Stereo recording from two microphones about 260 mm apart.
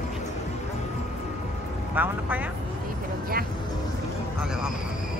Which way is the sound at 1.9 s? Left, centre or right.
Centre.